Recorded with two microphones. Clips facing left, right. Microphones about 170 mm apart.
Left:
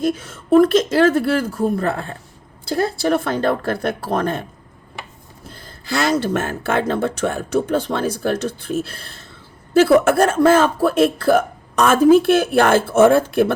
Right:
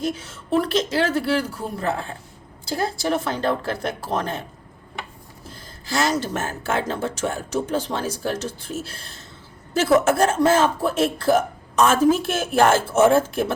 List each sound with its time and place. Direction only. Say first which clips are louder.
0.0 s a woman's voice: left 6 dB; 50° left (ahead or behind)
5.8 s speech: left 4 dB; 60° left (ahead or behind)